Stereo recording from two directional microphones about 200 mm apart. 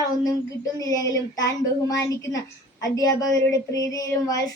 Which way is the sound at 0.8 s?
15° left (ahead or behind).